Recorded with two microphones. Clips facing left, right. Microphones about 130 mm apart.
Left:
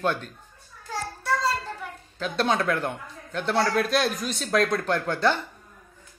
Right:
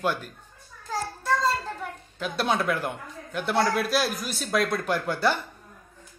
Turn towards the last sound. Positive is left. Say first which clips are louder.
# left 1 dB
turn(degrees=-5)  # may be behind; listen again after turning